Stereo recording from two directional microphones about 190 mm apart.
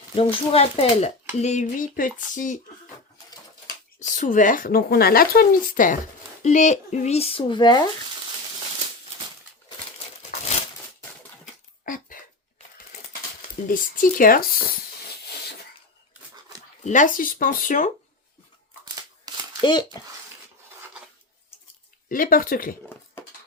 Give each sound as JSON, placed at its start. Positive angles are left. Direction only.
{"t": 0.2, "sound": "speech", "side_deg": 30}
{"t": 4.0, "sound": "speech", "side_deg": 40}
{"t": 11.9, "sound": "a sound", "side_deg": 45}
{"t": 13.7, "sound": "speech", "side_deg": 45}
{"t": 16.8, "sound": "speech", "side_deg": 40}
{"t": 19.3, "sound": "a sound", "side_deg": -20}
{"t": 19.6, "sound": "a child's voice", "side_deg": 20}
{"t": 22.1, "sound": "speech", "side_deg": 45}